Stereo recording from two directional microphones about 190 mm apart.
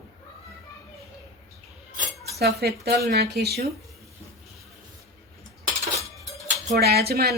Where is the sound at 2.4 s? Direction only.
55° right (ahead or behind).